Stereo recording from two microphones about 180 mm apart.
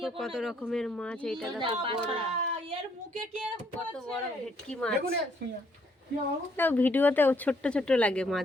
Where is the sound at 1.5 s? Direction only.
30° right (ahead or behind).